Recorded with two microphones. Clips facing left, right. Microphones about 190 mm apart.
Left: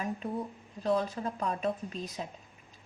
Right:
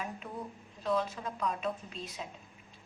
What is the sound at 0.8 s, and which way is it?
A woman's voice, 40° left (ahead or behind).